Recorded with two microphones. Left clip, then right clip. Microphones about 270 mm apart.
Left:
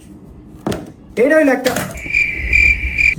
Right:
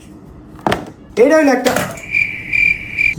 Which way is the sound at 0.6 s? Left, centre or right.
Centre.